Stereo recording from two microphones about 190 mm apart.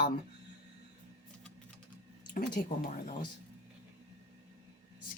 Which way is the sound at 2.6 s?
50° left (ahead or behind).